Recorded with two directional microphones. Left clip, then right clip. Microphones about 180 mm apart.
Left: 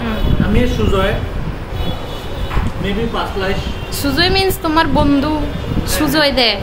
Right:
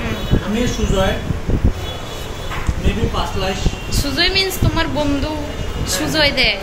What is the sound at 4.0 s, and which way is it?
A woman's voice, 30° left (ahead or behind).